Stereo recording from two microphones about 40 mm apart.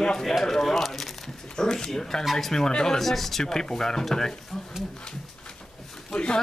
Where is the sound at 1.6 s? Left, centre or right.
Centre.